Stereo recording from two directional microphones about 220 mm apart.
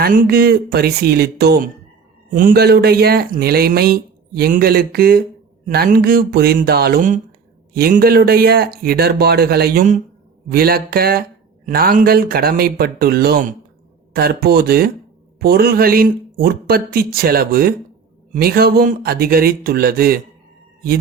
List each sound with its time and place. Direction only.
0.0 s speech: 40° right (ahead or behind)